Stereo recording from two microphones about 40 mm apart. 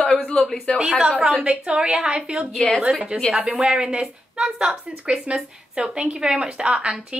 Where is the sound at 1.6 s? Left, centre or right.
Right.